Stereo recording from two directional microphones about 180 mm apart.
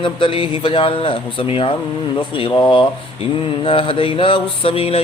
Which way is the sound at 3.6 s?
30° left (ahead or behind).